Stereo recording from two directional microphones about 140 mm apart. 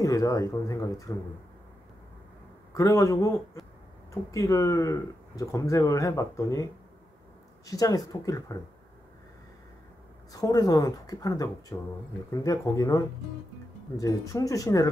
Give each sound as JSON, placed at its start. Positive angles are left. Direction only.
{"t": 0.0, "sound": "speech", "side_deg": 25}
{"t": 2.7, "sound": "speech", "side_deg": 20}
{"t": 10.3, "sound": "speech", "side_deg": 25}